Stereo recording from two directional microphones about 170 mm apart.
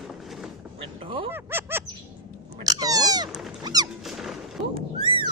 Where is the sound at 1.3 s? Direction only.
15° right (ahead or behind).